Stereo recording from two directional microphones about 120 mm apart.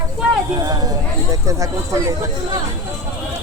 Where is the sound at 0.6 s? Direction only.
35° right (ahead or behind).